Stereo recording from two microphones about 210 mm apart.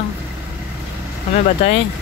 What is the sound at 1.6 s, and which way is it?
Speech, 30° left (ahead or behind).